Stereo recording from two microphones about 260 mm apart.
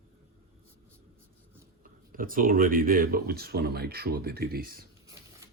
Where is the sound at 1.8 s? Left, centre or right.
Right.